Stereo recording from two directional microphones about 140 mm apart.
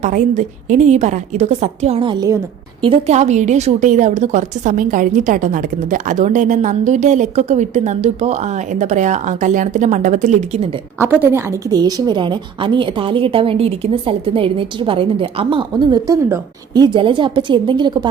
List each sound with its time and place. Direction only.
0.0 s a woman's voice: 65° right (ahead or behind); by 2.0 s 50° right (ahead or behind)
2.0 s a woman's voice: 30° right (ahead or behind)
3.1 s a woman's voice: 55° right (ahead or behind)
10.9 s a woman's voice: 15° right (ahead or behind); by 18.1 s 30° right (ahead or behind)